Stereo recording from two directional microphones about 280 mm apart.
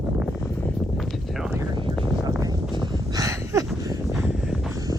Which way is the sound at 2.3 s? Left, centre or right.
Centre.